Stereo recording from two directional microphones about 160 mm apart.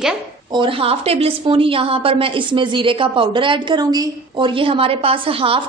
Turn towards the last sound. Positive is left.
turn(degrees=-35)  # may be behind; listen again after turning